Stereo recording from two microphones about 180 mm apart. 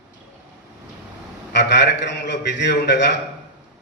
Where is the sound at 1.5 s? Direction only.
70° left (ahead or behind).